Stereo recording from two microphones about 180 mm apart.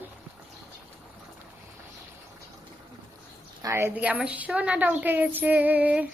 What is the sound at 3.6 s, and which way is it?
A woman's voice, 15° right (ahead or behind).